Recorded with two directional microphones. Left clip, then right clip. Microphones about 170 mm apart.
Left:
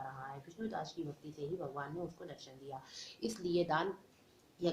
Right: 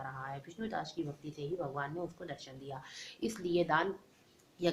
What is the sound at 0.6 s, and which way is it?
Speech, 45° right (ahead or behind).